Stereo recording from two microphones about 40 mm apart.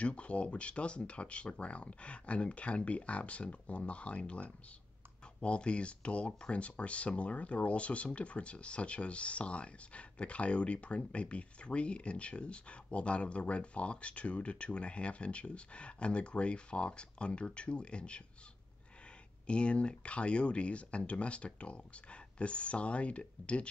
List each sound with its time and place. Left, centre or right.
0.0 s speech: left
19.4 s speech: left